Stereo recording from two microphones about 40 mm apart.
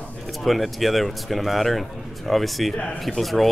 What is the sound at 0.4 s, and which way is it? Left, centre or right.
Speech, centre.